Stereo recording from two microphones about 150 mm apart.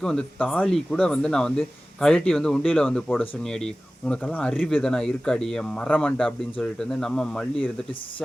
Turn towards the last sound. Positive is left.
turn(degrees=5)  # may be behind; listen again after turning